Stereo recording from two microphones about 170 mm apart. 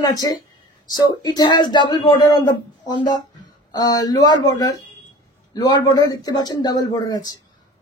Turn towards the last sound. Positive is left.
turn(degrees=25)  # may be behind; listen again after turning